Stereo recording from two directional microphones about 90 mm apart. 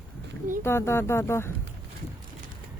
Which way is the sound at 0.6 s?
30° left (ahead or behind).